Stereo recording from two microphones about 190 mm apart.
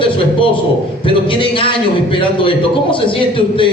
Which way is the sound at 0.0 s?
25° left (ahead or behind).